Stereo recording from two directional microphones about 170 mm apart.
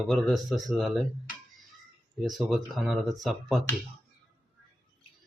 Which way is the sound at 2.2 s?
Centre (ahead or behind).